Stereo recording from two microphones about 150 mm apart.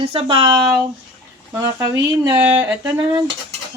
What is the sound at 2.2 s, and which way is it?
Speech, 30° right (ahead or behind).